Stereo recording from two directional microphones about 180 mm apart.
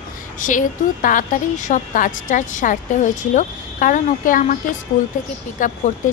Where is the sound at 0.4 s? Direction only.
45° left (ahead or behind).